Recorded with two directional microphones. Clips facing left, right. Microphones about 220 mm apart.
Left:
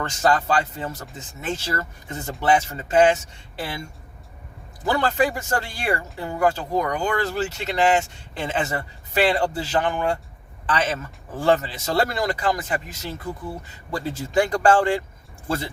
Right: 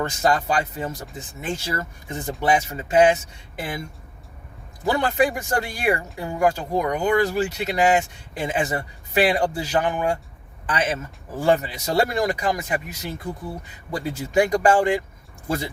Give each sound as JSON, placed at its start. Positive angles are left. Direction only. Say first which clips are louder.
{"t": 0.0, "sound": "speech", "louder": "even", "side_deg": -10}
{"t": 4.9, "sound": "speech", "louder": "right 1 dB", "side_deg": -15}